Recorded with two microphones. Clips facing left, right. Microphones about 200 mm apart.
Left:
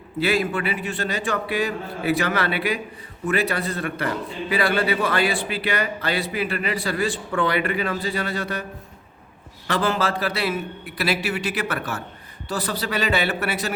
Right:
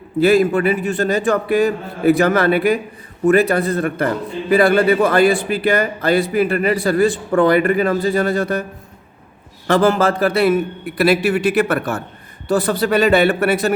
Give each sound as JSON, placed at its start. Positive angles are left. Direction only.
{"t": 0.2, "sound": "a man's voice", "side_deg": -45}
{"t": 9.6, "sound": "a man's voice", "side_deg": -45}